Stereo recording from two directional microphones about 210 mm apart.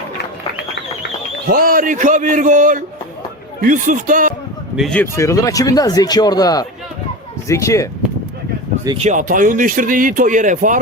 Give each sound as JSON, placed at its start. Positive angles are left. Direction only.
{"t": 1.5, "sound": "speech", "side_deg": -45}
{"t": 4.8, "sound": "speech", "side_deg": 5}
{"t": 9.0, "sound": "speech", "side_deg": -35}